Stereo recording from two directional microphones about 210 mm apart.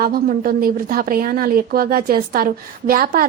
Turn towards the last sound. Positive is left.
turn(degrees=-45)  # may be behind; listen again after turning